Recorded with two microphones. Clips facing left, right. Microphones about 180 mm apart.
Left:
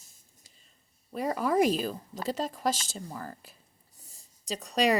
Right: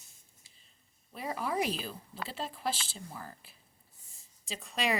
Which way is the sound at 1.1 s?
45° left (ahead or behind).